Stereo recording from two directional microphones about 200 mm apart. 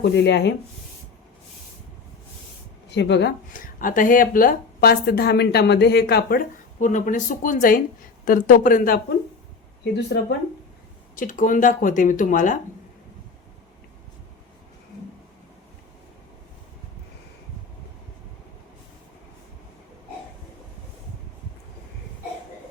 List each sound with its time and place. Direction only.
0.0 s speech: 60° left (ahead or behind)
2.9 s speech: 60° left (ahead or behind)
11.1 s speech: 40° left (ahead or behind)